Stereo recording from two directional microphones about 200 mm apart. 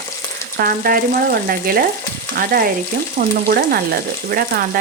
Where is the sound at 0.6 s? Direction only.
45° right (ahead or behind).